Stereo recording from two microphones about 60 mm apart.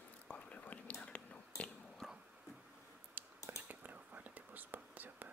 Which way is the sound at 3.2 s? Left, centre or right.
Right.